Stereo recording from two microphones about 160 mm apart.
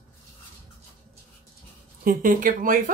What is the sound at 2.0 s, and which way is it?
Speech, 60° right (ahead or behind).